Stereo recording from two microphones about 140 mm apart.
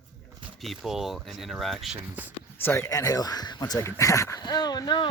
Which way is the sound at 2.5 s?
20° left (ahead or behind).